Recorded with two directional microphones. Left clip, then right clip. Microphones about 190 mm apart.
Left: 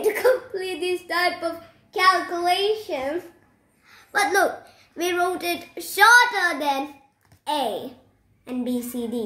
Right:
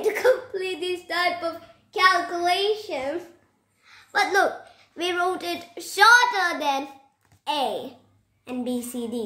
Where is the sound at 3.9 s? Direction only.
5° left (ahead or behind).